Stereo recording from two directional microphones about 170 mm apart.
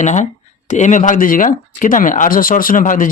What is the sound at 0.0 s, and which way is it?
Speech, 45° left (ahead or behind).